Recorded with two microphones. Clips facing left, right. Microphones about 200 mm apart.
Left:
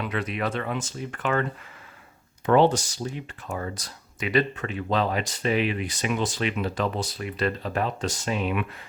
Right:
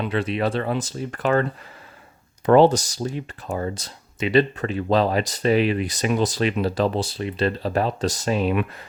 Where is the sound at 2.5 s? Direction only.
40° right (ahead or behind).